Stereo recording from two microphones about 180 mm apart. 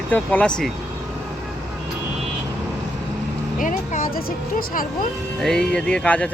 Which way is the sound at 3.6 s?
45° left (ahead or behind).